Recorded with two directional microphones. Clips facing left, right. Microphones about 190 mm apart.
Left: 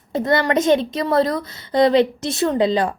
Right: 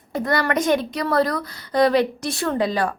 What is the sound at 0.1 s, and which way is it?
A woman's voice, 25° left (ahead or behind).